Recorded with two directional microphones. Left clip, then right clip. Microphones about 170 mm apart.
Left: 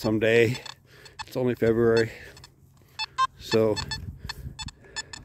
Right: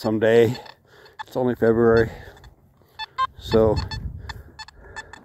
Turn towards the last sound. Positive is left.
turn(degrees=25)  # may be behind; listen again after turning